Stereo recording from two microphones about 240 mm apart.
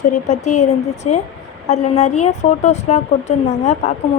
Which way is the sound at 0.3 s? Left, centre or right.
Left.